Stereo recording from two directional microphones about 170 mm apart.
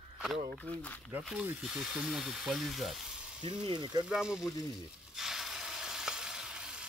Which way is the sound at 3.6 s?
25° right (ahead or behind).